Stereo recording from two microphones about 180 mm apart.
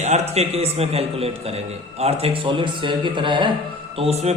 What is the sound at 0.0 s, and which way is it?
A man's voice, 35° right (ahead or behind).